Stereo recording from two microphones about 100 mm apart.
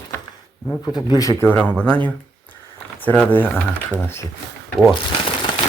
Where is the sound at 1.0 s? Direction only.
45° left (ahead or behind).